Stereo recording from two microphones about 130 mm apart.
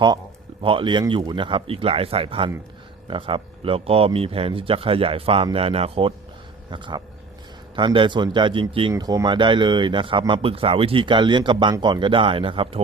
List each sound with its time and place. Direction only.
0.6 s speech: 40° right (ahead or behind)
8.9 s speech: 25° right (ahead or behind); by 12.8 s 45° right (ahead or behind)